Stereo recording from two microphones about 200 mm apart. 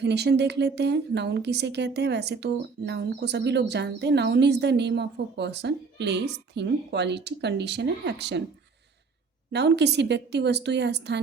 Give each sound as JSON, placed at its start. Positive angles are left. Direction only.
{"t": 0.0, "sound": "a woman's voice", "side_deg": -55}
{"t": 9.5, "sound": "a woman's voice", "side_deg": -60}